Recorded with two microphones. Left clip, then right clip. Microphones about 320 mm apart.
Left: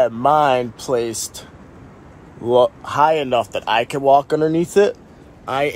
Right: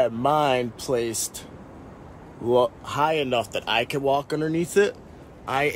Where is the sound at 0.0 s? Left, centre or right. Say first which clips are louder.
Left 6 dB; centre.